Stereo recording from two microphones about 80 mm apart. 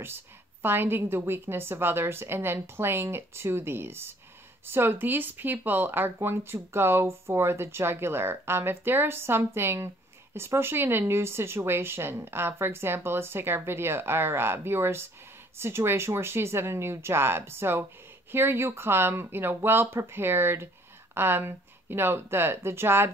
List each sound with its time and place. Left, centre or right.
0.0 s speech: right